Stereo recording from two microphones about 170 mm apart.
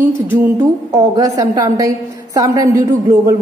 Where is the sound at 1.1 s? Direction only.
20° right (ahead or behind).